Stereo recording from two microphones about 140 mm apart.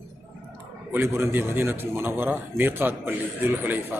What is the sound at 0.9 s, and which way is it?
A man's voice, 15° right (ahead or behind).